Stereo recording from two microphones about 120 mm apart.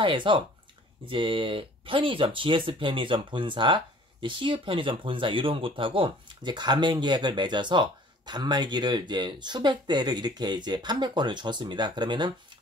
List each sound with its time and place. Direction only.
0.0 s speech: 45° right (ahead or behind)